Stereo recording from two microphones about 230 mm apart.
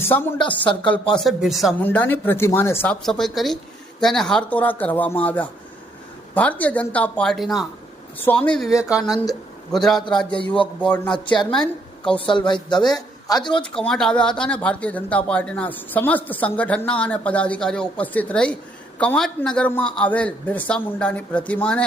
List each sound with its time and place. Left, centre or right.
0.0 s a woman's voice: centre
12.5 s a man's voice: centre
13.7 s speech: centre